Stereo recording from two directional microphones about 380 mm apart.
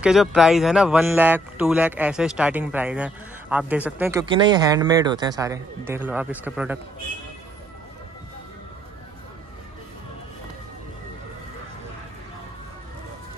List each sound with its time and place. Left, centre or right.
0.0 s speech: centre